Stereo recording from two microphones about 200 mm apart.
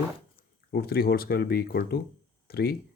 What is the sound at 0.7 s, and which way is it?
Speech, 50° left (ahead or behind).